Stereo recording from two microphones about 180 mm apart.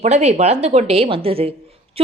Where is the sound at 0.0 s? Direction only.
35° right (ahead or behind).